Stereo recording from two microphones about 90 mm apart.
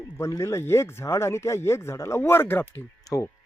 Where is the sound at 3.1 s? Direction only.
45° left (ahead or behind).